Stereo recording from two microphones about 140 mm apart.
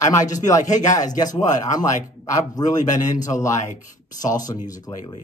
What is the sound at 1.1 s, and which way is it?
Speech, 25° left (ahead or behind).